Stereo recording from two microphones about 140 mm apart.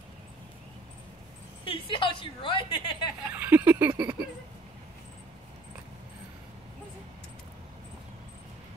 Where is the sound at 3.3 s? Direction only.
15° right (ahead or behind).